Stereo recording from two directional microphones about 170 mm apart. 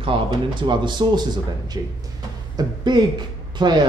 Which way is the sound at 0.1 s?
30° right (ahead or behind).